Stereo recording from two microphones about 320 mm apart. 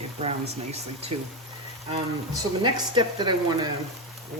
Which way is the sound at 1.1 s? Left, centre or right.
Right.